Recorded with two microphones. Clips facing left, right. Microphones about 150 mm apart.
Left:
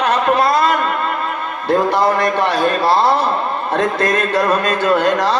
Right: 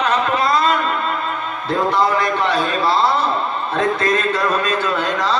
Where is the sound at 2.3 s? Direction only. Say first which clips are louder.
Left 3 dB; 65° left (ahead or behind).